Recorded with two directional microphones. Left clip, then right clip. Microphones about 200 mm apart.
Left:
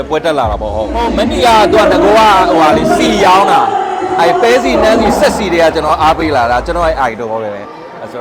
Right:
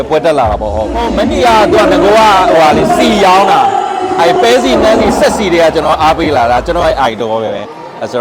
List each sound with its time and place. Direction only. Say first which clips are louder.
0.1 s speech: right 3 dB; 15° right (ahead or behind)
3.1 s music: even; 20° right (ahead or behind)
4.2 s speech: right 1 dB; 20° right (ahead or behind)